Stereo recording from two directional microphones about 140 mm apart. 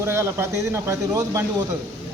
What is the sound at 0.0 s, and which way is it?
A man's voice, 20° right (ahead or behind).